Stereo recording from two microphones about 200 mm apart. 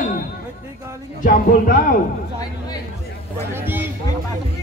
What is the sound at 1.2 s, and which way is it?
Speech, 45° left (ahead or behind).